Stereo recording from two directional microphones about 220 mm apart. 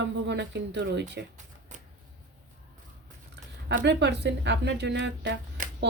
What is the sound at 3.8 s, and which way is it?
Speech, 50° right (ahead or behind).